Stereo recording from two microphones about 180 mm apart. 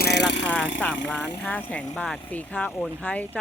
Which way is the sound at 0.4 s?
5° left (ahead or behind).